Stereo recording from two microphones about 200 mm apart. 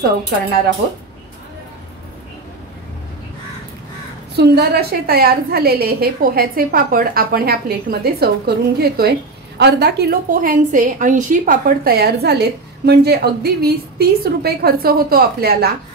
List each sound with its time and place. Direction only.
4.4 s a woman's voice: 55° right (ahead or behind)